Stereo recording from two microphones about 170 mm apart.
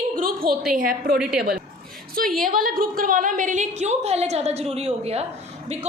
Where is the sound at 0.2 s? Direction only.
55° right (ahead or behind).